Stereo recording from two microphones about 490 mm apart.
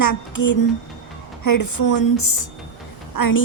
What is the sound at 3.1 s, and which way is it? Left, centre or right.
Speech, left.